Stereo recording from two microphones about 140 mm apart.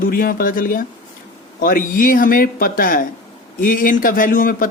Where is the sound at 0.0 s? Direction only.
90° left.